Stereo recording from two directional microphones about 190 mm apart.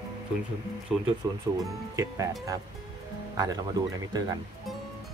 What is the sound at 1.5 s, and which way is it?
Speech, 10° right (ahead or behind).